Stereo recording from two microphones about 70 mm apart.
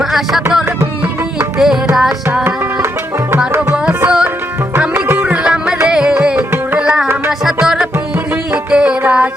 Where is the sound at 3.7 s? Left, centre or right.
Centre.